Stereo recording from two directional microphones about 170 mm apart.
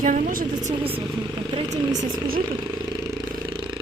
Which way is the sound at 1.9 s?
50° right (ahead or behind).